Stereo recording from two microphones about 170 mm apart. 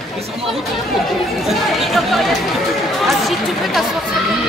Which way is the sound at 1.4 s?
Centre (ahead or behind).